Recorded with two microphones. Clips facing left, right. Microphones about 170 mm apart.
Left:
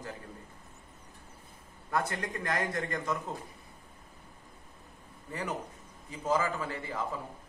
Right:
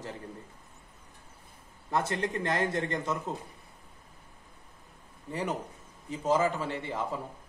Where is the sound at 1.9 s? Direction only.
25° right (ahead or behind).